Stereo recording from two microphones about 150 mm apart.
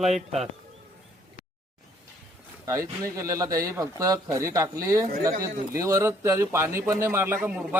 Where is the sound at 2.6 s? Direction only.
20° right (ahead or behind).